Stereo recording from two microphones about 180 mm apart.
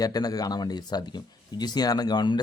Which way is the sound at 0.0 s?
20° left (ahead or behind).